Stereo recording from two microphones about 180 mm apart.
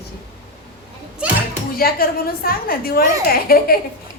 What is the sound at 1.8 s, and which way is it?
A woman's voice, 55° left (ahead or behind).